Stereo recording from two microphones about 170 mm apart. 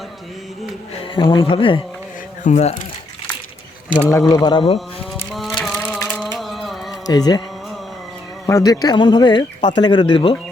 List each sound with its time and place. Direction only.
1.1 s speech: 30° left (ahead or behind)
2.4 s speech: 40° left (ahead or behind)
4.1 s speech: 20° left (ahead or behind)
5.3 s a sound: centre (ahead or behind)
5.6 s crushing: centre (ahead or behind)
6.1 s a sound: centre (ahead or behind)
7.1 s speech: 25° left (ahead or behind)
8.4 s speech: 20° left (ahead or behind)